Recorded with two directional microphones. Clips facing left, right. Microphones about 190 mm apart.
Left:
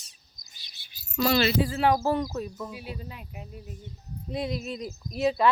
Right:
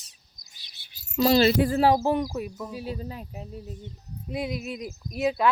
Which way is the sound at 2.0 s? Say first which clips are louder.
Right 2 dB; 15° right (ahead or behind).